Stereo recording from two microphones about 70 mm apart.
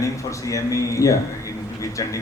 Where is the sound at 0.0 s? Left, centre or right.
Left.